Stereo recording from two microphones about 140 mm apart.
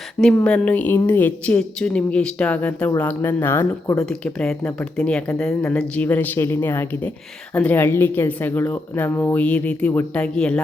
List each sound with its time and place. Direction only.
0.2 s speech: 5° left (ahead or behind)
3.9 s speech: 5° left (ahead or behind)